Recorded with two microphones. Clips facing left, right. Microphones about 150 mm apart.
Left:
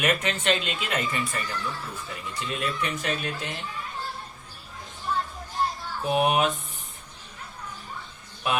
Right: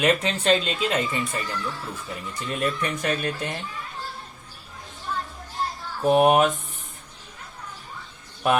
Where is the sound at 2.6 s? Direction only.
45° right (ahead or behind).